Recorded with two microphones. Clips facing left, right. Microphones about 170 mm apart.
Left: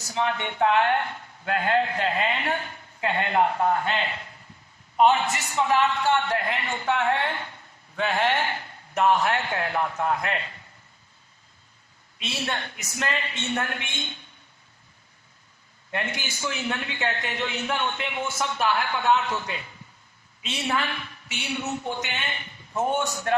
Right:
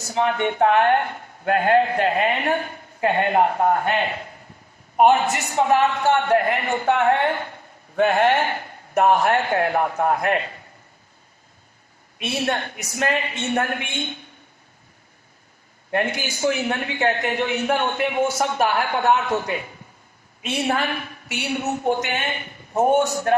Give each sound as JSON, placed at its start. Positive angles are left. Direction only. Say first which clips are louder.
{"t": 0.1, "sound": "a man's voice", "louder": "right 6 dB", "side_deg": -50}
{"t": 12.2, "sound": "a man's voice", "louder": "right 7 dB", "side_deg": -55}
{"t": 15.9, "sound": "a man's voice", "louder": "right 8 dB", "side_deg": -55}